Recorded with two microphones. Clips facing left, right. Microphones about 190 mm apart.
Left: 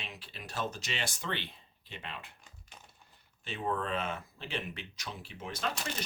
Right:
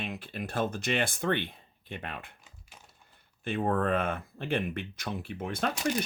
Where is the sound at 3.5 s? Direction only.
55° right (ahead or behind).